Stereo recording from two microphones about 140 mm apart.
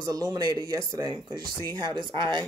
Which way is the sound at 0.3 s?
30° right (ahead or behind).